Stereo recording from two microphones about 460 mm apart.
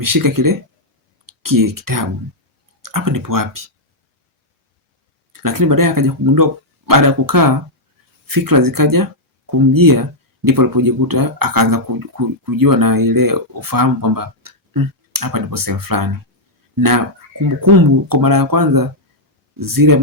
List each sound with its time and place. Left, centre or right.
0.0 s speech: right
5.3 s speech: right